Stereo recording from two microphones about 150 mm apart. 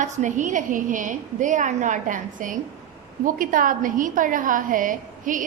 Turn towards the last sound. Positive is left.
turn(degrees=-60)  # may be behind; listen again after turning